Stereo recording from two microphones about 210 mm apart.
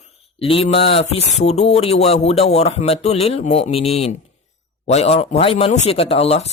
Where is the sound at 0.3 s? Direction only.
25° left (ahead or behind).